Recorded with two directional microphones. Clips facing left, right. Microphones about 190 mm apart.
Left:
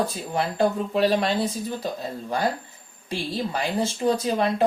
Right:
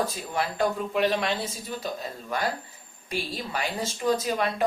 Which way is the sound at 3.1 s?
30° left (ahead or behind).